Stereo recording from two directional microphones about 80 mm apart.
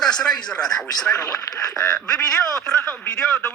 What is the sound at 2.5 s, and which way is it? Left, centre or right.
A man's voice, centre.